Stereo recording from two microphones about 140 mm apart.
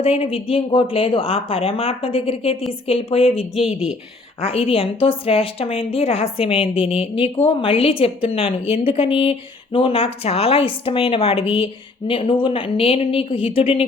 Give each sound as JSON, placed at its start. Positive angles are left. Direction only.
{"t": 0.0, "sound": "a woman's voice", "side_deg": 45}
{"t": 3.5, "sound": "speech", "side_deg": -5}
{"t": 4.4, "sound": "a woman's voice", "side_deg": 45}